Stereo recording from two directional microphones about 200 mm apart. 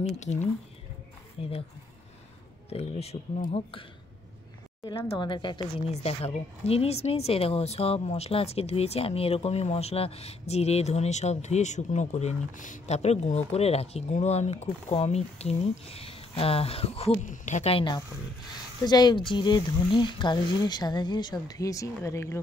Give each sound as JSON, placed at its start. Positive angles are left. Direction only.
{"t": 1.4, "sound": "speech", "side_deg": 25}
{"t": 2.7, "sound": "a woman's voice", "side_deg": 30}
{"t": 4.8, "sound": "a woman's voice", "side_deg": 20}